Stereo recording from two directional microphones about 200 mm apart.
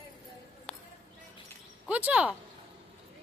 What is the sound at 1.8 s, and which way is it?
Speech, 5° right (ahead or behind).